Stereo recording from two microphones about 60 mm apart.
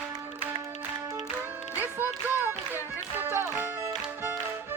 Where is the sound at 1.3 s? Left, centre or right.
Right.